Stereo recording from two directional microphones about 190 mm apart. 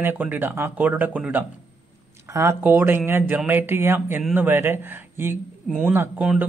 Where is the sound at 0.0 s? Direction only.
10° right (ahead or behind).